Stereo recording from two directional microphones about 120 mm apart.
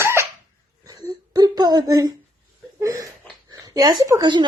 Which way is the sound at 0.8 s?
35° right (ahead or behind).